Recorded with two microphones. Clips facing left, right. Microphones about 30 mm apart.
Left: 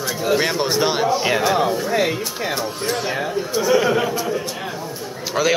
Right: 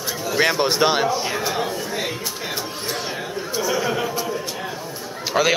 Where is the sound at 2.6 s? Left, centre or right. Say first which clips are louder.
Left 4 dB; centre.